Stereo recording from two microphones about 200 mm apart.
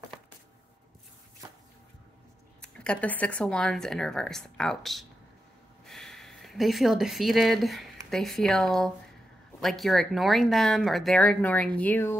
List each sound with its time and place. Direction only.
2.6 s speech: 5° left (ahead or behind)